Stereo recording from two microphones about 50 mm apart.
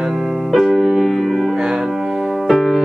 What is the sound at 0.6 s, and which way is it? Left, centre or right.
Music, centre.